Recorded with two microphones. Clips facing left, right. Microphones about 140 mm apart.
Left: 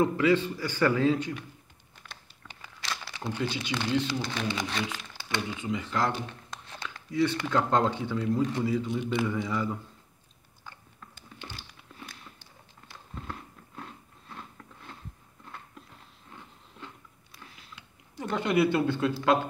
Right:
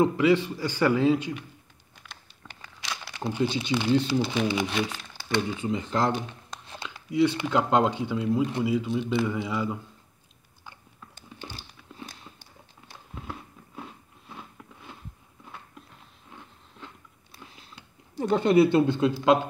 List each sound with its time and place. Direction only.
0.0 s speech: 15° right (ahead or behind)
2.0 s a sound: 5° right (ahead or behind)
2.4 s crumpling: centre (ahead or behind)
3.4 s speech: 25° right (ahead or behind)
4.1 s speech: 10° right (ahead or behind)
5.6 s speech: 35° right (ahead or behind)
6.8 s speech: 15° right (ahead or behind)
13.1 s biting: 5° right (ahead or behind)
15.4 s biting: 5° right (ahead or behind)
16.3 s wood: centre (ahead or behind)
17.3 s a sound: 30° right (ahead or behind)